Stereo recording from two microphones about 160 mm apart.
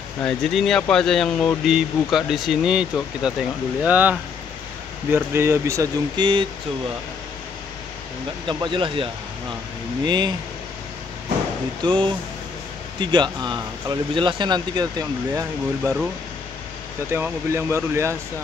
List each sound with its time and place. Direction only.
0.2 s speech: 5° left (ahead or behind); by 6.4 s 30° right (ahead or behind)
8.5 s speech: 30° right (ahead or behind)
11.8 s speech: 30° right (ahead or behind)
17.1 s speech: 15° right (ahead or behind)